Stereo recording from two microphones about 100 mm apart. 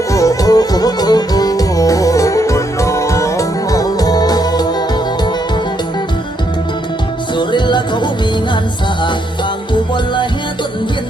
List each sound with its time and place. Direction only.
0.1 s music: 35° left (ahead or behind)
7.3 s music: 50° left (ahead or behind)